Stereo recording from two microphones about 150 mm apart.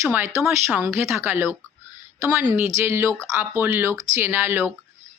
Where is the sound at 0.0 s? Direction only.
15° right (ahead or behind).